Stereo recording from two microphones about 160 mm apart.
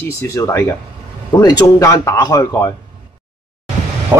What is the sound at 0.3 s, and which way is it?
Speech, 15° left (ahead or behind).